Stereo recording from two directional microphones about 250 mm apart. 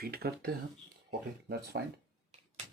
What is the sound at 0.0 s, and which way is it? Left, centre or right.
Speech, right.